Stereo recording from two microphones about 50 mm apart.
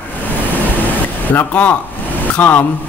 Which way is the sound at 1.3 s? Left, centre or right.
Left.